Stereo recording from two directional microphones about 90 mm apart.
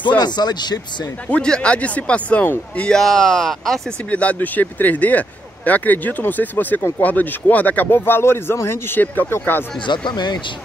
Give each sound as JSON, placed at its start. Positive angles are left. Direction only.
{"t": 0.2, "sound": "speech", "side_deg": 50}
{"t": 1.3, "sound": "speech", "side_deg": 10}
{"t": 2.9, "sound": "speech", "side_deg": 5}
{"t": 4.1, "sound": "speech", "side_deg": 15}
{"t": 9.8, "sound": "speech", "side_deg": 55}